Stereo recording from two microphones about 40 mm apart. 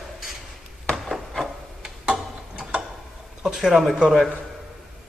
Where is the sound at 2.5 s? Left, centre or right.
Right.